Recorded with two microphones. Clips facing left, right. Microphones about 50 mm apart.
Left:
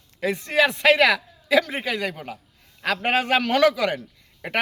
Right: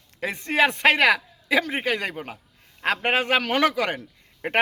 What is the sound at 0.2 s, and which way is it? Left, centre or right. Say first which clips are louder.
Speech: left 1 dB; right.